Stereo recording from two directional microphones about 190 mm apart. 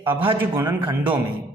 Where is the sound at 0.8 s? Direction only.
25° right (ahead or behind).